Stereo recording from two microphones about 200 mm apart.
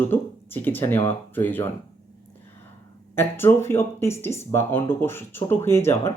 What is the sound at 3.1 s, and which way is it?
Speech, 10° left (ahead or behind).